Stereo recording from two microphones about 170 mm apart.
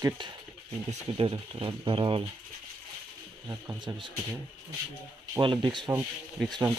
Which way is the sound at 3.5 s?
15° right (ahead or behind).